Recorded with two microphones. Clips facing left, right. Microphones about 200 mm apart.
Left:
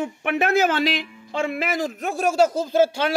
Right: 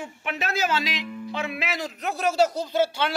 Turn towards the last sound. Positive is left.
turn(degrees=45)  # may be behind; listen again after turning